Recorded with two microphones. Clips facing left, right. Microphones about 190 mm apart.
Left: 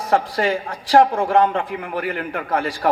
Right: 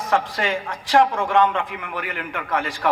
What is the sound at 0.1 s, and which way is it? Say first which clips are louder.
A man's voice: left 4 dB; 40° left (ahead or behind).